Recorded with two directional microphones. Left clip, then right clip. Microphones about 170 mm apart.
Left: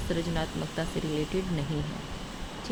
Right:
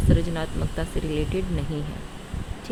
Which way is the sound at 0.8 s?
10° right (ahead or behind).